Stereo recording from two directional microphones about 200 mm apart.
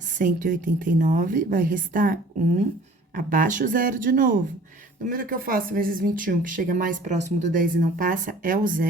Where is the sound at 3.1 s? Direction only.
45° right (ahead or behind).